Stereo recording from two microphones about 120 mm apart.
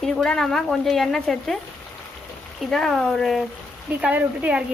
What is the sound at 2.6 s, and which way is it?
Speech, 5° left (ahead or behind).